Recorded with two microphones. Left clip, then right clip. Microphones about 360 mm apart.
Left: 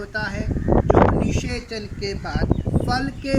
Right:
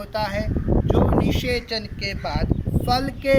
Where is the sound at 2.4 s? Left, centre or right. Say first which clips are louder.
Left 3 dB; left.